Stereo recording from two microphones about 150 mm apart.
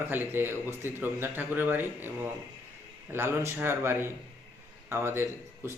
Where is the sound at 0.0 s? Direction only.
15° right (ahead or behind).